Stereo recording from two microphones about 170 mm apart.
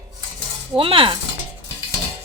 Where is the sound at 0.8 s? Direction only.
30° right (ahead or behind).